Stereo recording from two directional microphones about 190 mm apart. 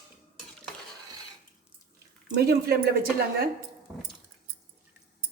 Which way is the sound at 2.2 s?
55° right (ahead or behind).